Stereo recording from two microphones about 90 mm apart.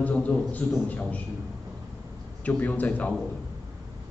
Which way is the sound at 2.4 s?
15° left (ahead or behind).